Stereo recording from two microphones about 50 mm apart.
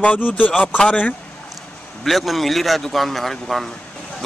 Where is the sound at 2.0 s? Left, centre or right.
Centre.